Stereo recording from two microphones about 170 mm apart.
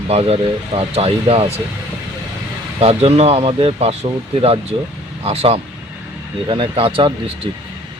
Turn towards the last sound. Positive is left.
turn(degrees=-30)  # may be behind; listen again after turning